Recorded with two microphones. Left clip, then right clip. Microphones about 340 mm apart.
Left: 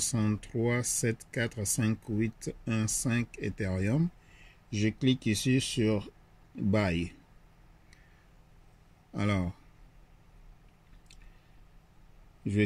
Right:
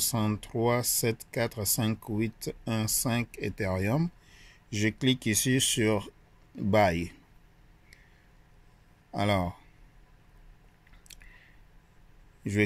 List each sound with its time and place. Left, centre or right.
0.0 s speech: centre
9.1 s speech: centre